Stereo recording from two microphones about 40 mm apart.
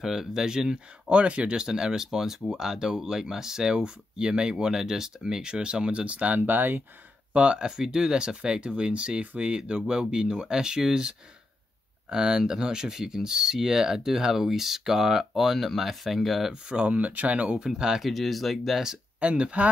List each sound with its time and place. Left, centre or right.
0.0 s speech: centre
1.0 s speech: right
6.4 s speech: right
7.3 s speech: right; by 16.5 s centre
16.6 s speech: right
17.6 s speech: centre
18.0 s speech: centre
19.1 s speech: right